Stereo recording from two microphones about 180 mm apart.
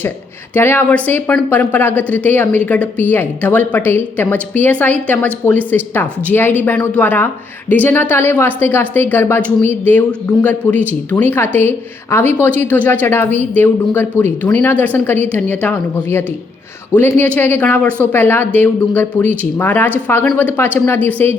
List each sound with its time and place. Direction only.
0.5 s speech: 10° left (ahead or behind)